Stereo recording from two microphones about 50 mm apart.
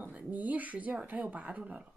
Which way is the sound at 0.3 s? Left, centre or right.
Right.